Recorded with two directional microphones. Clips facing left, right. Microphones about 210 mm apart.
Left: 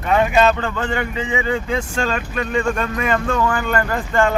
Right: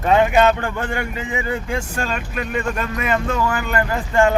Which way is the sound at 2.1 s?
10° right (ahead or behind).